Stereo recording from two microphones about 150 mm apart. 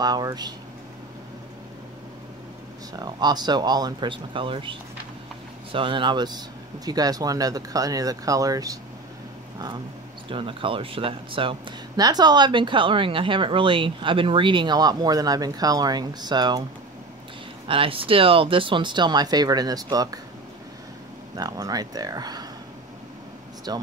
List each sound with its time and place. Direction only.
0.0 s speech: 25° right (ahead or behind)
3.0 s speech: 25° right (ahead or behind)
10.3 s speech: 35° right (ahead or behind)
17.6 s speech: 35° right (ahead or behind)
21.4 s speech: 25° right (ahead or behind)
23.7 s speech: 25° right (ahead or behind)